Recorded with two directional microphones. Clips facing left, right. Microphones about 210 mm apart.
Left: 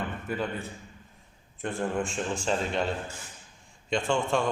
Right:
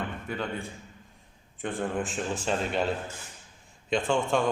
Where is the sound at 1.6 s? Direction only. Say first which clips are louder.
Left 1 dB; centre (ahead or behind).